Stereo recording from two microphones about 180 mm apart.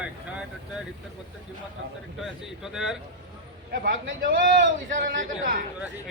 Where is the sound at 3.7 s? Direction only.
60° right (ahead or behind).